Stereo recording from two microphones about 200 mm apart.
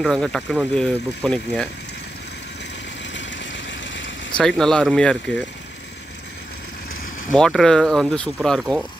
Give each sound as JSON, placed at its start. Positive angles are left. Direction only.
{"t": 0.0, "sound": "speech", "side_deg": 0}
{"t": 3.2, "sound": "vehicle", "side_deg": 65}
{"t": 4.4, "sound": "speech", "side_deg": 0}
{"t": 7.3, "sound": "speech", "side_deg": 5}